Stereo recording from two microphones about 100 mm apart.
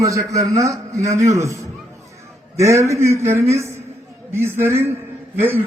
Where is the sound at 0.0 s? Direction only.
35° right (ahead or behind).